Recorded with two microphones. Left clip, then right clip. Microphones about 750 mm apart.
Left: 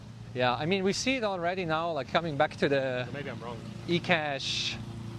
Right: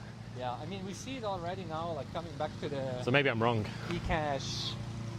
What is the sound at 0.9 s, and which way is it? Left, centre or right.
Speech, left.